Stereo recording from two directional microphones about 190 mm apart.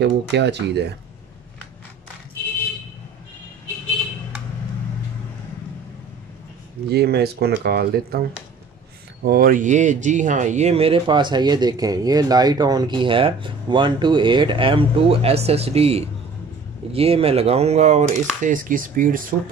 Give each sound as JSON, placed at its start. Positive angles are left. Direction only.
{"t": 0.0, "sound": "speech", "side_deg": -65}
{"t": 6.9, "sound": "speech", "side_deg": -55}